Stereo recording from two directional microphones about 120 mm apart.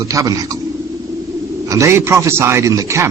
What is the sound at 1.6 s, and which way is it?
A man's voice, 25° right (ahead or behind).